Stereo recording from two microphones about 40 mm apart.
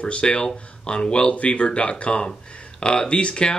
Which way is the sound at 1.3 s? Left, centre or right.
Left.